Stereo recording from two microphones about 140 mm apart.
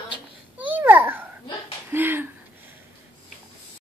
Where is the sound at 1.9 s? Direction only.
15° right (ahead or behind).